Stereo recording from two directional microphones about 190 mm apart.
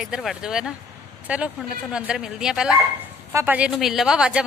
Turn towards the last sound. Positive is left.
turn(degrees=-5)  # may be behind; listen again after turning